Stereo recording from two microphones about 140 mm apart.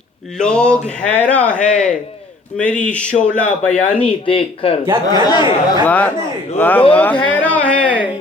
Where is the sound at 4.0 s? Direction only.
40° left (ahead or behind).